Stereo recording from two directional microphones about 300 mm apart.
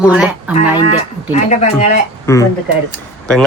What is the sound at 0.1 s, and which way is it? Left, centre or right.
Speech, centre.